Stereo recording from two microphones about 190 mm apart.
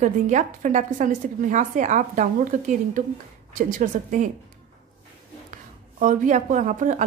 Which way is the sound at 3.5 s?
45° right (ahead or behind).